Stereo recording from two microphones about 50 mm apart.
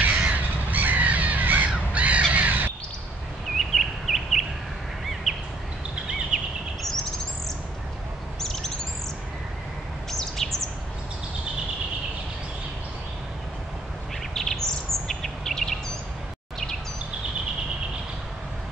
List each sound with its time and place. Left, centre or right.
0.2 s crow: right
3.5 s bird: centre
5.3 s a sound: centre
6.3 s bird vocalization: centre
8.4 s bird: centre
10.1 s bird: centre
14.3 s bird: centre